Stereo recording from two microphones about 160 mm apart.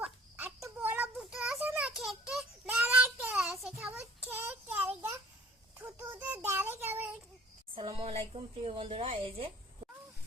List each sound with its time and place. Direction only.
0.0 s a sound: 10° right (ahead or behind)
1.2 s child singing: 5° right (ahead or behind)
7.8 s a woman's voice: 30° right (ahead or behind)